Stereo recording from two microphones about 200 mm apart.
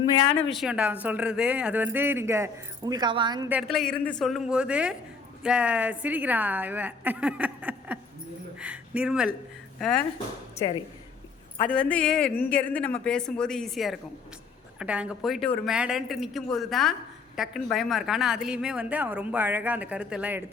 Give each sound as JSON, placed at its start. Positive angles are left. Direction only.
{"t": 0.5, "sound": "speech", "side_deg": -5}
{"t": 3.5, "sound": "a woman's voice", "side_deg": 0}
{"t": 10.6, "sound": "speech", "side_deg": 20}
{"t": 11.6, "sound": "a woman's voice", "side_deg": 5}